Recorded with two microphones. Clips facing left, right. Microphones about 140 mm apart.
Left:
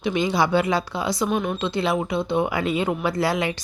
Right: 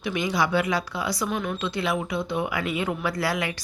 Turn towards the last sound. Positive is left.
turn(degrees=25)  # may be behind; listen again after turning